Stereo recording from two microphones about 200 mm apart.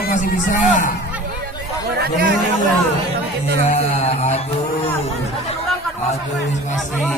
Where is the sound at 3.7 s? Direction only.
35° left (ahead or behind).